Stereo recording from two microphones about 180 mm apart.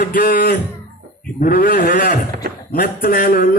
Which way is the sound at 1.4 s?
55° left (ahead or behind).